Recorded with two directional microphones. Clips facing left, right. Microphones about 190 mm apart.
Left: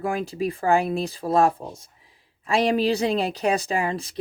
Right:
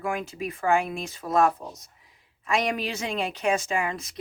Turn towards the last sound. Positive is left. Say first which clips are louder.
# left 3 dB
turn(degrees=30)  # may be behind; listen again after turning